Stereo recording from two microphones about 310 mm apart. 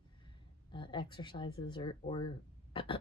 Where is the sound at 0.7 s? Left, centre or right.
Centre.